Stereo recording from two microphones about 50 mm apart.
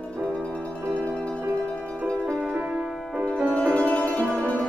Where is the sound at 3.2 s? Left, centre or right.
Centre.